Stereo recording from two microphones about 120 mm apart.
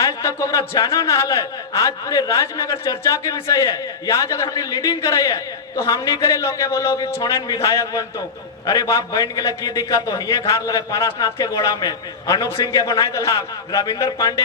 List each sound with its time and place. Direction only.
0.0 s a man's voice: 25° left (ahead or behind)